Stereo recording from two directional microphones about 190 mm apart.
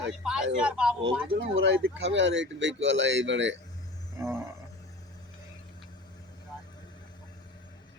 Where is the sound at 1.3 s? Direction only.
65° right (ahead or behind).